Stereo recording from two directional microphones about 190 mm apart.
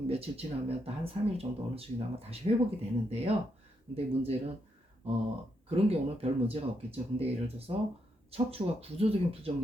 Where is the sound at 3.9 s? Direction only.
30° right (ahead or behind).